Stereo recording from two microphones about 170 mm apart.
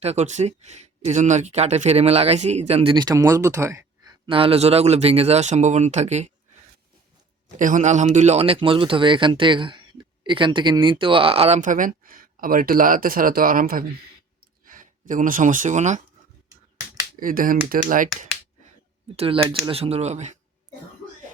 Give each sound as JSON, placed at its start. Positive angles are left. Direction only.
{"t": 0.0, "sound": "speech", "side_deg": -40}
{"t": 4.3, "sound": "speech", "side_deg": -30}
{"t": 7.5, "sound": "speech", "side_deg": -50}
{"t": 17.2, "sound": "speech", "side_deg": -55}
{"t": 19.1, "sound": "speech", "side_deg": -35}